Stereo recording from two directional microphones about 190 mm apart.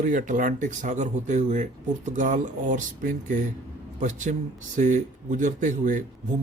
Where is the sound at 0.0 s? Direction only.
45° right (ahead or behind).